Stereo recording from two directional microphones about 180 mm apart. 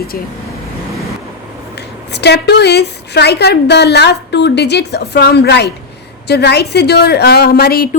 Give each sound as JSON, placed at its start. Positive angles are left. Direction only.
{"t": 2.1, "sound": "a woman's voice", "side_deg": 70}